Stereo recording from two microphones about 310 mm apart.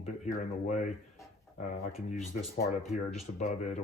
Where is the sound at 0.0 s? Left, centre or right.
Left.